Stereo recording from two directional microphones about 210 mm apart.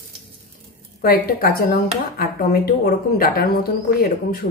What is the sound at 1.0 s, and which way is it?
A woman's voice, 45° left (ahead or behind).